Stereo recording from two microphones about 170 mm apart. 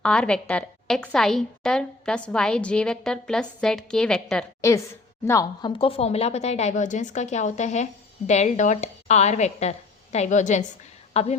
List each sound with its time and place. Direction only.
0.0 s a woman's voice: 5° left (ahead or behind)
5.2 s a woman's voice: 20° left (ahead or behind)
5.8 s a woman's voice: 35° left (ahead or behind)